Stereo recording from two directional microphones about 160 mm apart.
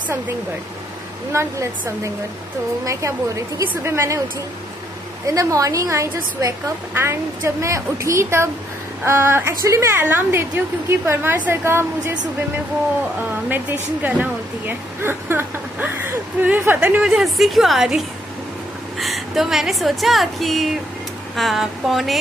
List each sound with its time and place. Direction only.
1.3 s a woman's voice: 15° right (ahead or behind)
5.2 s a woman's voice: 20° right (ahead or behind)
13.5 s a woman's voice: 10° right (ahead or behind)